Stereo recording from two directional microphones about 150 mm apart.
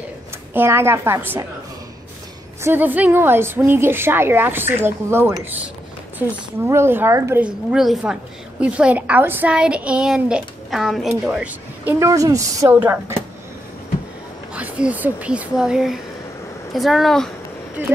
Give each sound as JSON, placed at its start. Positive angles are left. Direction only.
{"t": 0.5, "sound": "a woman's voice", "side_deg": -15}
{"t": 2.6, "sound": "a woman's voice", "side_deg": -15}
{"t": 7.4, "sound": "a woman's voice", "side_deg": -5}
{"t": 14.5, "sound": "speech", "side_deg": -10}
{"t": 17.8, "sound": "a woman's voice", "side_deg": -10}